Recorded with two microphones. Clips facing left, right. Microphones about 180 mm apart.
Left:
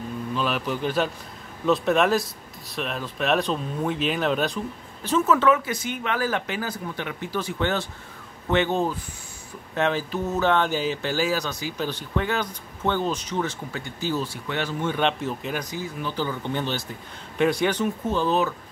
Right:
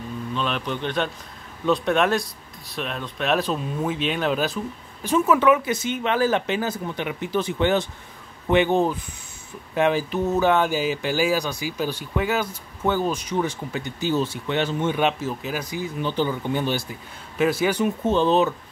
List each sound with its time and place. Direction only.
0.3 s speech: 5° left (ahead or behind)
5.0 s speech: 10° right (ahead or behind)
15.0 s speech: 5° right (ahead or behind)
16.0 s speech: 25° right (ahead or behind)
16.3 s speech: 10° right (ahead or behind)
18.0 s speech: 25° right (ahead or behind)